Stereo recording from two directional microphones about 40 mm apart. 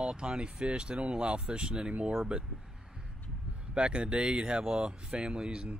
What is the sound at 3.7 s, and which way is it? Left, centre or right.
Speech, right.